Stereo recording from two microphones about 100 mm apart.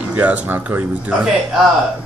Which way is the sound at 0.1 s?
15° right (ahead or behind).